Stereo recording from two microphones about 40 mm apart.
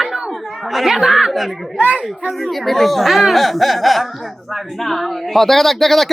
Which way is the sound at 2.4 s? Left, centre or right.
Centre.